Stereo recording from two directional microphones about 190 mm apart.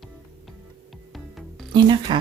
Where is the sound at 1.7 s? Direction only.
25° right (ahead or behind).